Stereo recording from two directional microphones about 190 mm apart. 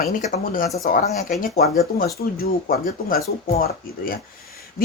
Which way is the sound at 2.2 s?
55° left (ahead or behind).